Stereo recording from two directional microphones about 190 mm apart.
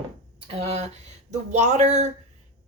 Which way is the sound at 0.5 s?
35° right (ahead or behind).